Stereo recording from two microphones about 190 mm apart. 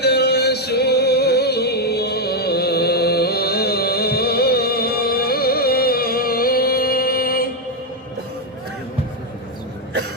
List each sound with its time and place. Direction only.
0.0 s music: 60° left (ahead or behind)